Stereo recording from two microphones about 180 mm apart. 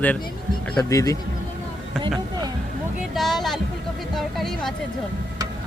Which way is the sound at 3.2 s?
Centre (ahead or behind).